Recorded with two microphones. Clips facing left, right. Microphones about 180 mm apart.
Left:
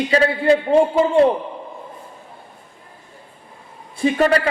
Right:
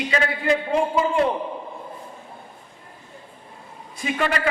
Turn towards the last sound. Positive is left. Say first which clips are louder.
# left 8 dB
turn(degrees=35)  # may be behind; listen again after turning